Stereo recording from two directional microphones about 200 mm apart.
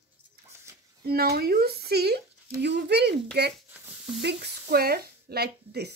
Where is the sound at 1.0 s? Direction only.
50° right (ahead or behind).